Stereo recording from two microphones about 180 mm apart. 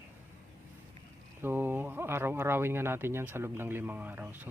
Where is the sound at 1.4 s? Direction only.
10° right (ahead or behind).